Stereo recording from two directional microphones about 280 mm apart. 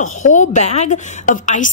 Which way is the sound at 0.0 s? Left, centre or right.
Left.